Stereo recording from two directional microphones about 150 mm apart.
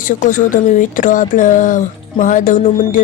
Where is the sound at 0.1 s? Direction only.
60° left (ahead or behind).